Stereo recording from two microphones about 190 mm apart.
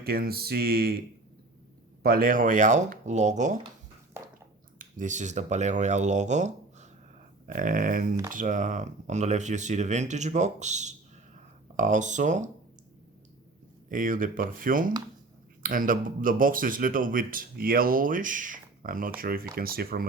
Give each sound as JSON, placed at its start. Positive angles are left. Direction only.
{"t": 0.0, "sound": "speech", "side_deg": -55}
{"t": 2.0, "sound": "speech", "side_deg": -50}
{"t": 4.1, "sound": "a sound", "side_deg": -15}
{"t": 4.8, "sound": "speech", "side_deg": -40}
{"t": 13.9, "sound": "speech", "side_deg": -45}